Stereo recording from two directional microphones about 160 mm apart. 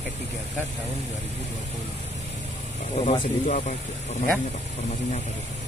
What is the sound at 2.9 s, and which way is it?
Speech, 40° left (ahead or behind).